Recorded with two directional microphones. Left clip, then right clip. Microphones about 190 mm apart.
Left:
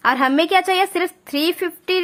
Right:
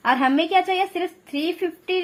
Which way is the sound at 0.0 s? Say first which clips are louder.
Left 3 dB; 25° left (ahead or behind).